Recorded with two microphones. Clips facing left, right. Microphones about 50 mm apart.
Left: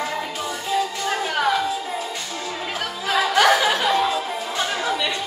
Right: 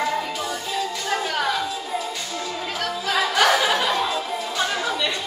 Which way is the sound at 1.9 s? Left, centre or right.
Left.